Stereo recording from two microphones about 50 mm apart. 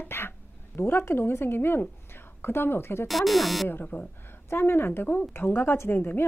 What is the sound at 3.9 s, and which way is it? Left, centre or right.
A woman's voice, left.